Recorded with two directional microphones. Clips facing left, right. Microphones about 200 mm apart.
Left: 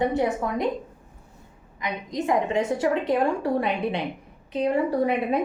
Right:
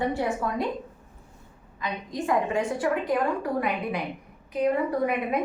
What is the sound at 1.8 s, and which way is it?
A woman's voice, 20° left (ahead or behind).